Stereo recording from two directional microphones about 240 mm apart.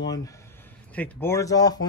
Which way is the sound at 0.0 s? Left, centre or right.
Centre.